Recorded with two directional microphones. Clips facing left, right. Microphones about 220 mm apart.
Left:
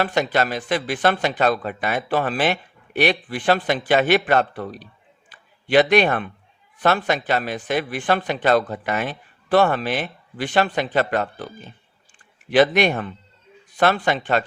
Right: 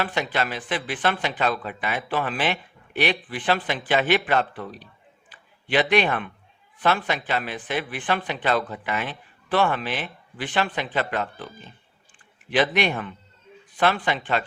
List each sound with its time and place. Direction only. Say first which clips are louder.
0.0 s speech: left 5 dB; 40° left (ahead or behind)
12.5 s speech: left 6 dB; 45° left (ahead or behind)